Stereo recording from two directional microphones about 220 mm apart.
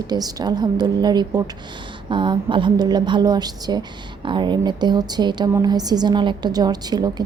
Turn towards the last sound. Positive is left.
turn(degrees=-20)  # may be behind; listen again after turning